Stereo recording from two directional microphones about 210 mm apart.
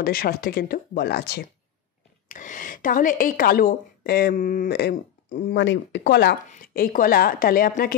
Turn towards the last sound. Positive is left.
turn(degrees=45)  # may be behind; listen again after turning